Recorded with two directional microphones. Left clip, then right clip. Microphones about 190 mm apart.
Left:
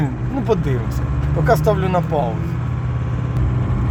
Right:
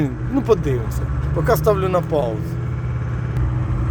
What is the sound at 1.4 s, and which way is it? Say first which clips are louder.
Speech: even; 10° right (ahead or behind).